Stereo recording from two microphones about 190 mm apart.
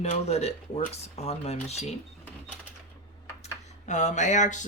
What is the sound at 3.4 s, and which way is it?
Speech, 40° left (ahead or behind).